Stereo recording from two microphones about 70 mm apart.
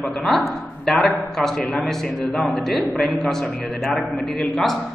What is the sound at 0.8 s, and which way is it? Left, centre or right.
A man's voice, centre.